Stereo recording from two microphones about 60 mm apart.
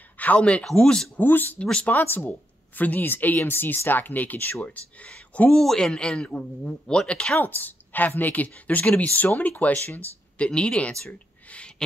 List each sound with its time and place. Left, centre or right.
0.2 s speech: left
1.1 s a woman's voice: left
1.6 s speech: centre
2.0 s a woman's voice: left
5.5 s speech: centre
7.3 s speech: left; by 11.1 s centre
11.4 s a sound: left